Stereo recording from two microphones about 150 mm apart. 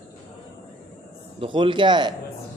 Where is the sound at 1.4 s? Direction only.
35° right (ahead or behind).